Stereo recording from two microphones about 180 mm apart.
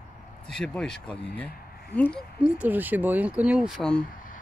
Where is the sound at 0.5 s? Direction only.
5° left (ahead or behind).